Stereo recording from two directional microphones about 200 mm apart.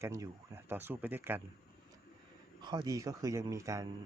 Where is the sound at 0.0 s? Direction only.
15° right (ahead or behind).